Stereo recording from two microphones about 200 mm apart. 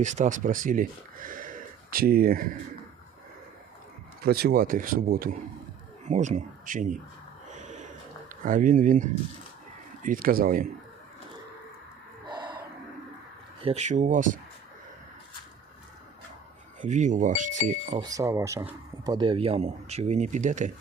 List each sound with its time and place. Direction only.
0.0 s speech: 35° right (ahead or behind)
4.2 s speech: 50° right (ahead or behind)
6.1 s speech: 35° right (ahead or behind)
7.5 s a sound: 35° right (ahead or behind)
8.4 s speech: 40° right (ahead or behind)
12.3 s gasp: 25° right (ahead or behind)
13.6 s speech: 30° right (ahead or behind)
16.8 s speech: 40° right (ahead or behind)
18.0 s speech: 15° right (ahead or behind); by 20.7 s 35° right (ahead or behind)